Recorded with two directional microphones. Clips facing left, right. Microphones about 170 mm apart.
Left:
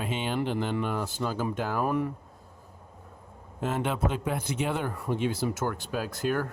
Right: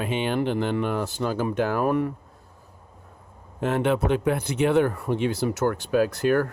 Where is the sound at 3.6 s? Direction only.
65° right (ahead or behind).